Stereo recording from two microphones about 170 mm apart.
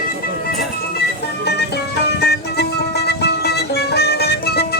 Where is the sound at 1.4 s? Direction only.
75° left (ahead or behind).